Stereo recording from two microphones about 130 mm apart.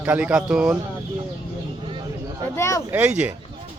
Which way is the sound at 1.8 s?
40° right (ahead or behind).